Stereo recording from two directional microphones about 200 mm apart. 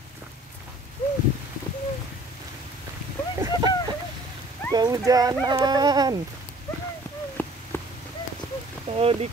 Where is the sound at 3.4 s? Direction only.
20° right (ahead or behind).